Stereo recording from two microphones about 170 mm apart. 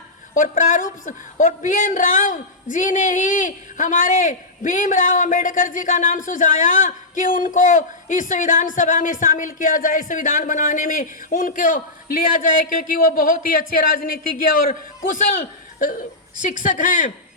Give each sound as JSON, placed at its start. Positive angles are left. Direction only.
{"t": 0.3, "sound": "a woman's voice", "side_deg": 50}